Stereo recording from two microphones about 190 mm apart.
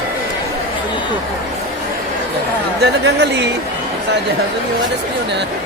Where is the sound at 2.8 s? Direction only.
60° right (ahead or behind).